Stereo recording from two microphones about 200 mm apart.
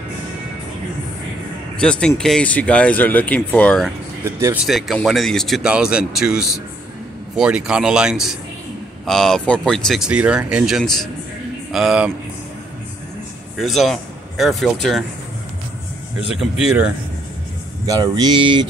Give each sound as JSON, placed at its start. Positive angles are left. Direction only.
{"t": 1.8, "sound": "speech", "side_deg": 5}
{"t": 4.2, "sound": "speech", "side_deg": -15}
{"t": 4.6, "sound": "speech", "side_deg": 0}
{"t": 13.6, "sound": "speech", "side_deg": 0}
{"t": 16.3, "sound": "speech", "side_deg": -5}
{"t": 17.8, "sound": "speech", "side_deg": -20}